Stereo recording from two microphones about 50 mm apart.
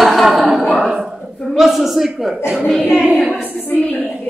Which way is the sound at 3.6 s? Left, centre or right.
Left.